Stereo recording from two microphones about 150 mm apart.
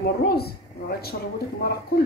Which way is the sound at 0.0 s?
90° left.